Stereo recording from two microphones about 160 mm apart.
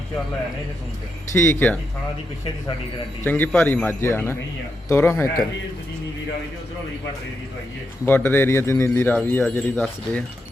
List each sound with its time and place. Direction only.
1.3 s speech: 15° left (ahead or behind)
3.2 s speech: 10° left (ahead or behind)
8.0 s speech: 10° left (ahead or behind)